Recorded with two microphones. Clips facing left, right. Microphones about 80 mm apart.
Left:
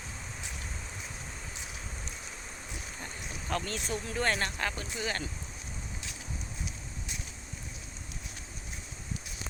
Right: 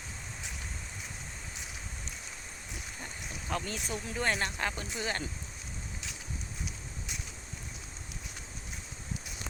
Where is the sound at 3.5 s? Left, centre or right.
Centre.